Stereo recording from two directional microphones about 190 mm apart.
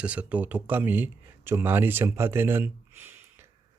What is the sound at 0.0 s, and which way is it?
Speech, 5° right (ahead or behind).